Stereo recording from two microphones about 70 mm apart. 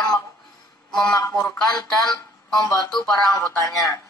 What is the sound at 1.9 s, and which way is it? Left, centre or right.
Speech, centre.